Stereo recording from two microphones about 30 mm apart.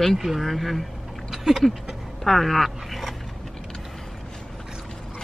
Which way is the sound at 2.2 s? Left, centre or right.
Centre.